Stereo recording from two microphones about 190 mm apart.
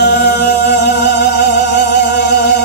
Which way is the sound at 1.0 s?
60° left (ahead or behind).